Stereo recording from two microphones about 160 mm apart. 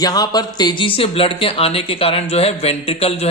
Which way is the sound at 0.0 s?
25° left (ahead or behind).